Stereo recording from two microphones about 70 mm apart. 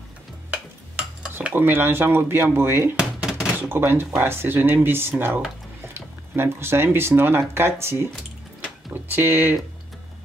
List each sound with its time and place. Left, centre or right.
0.5 s stir: centre
1.5 s speech: right
3.0 s a sound: centre
3.6 s speech: right
9.1 s speech: right